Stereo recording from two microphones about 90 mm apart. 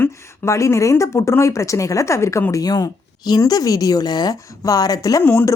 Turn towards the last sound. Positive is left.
turn(degrees=25)  # may be behind; listen again after turning